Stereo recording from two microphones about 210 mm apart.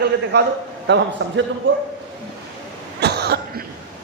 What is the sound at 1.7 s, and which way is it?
Speech, 60° right (ahead or behind).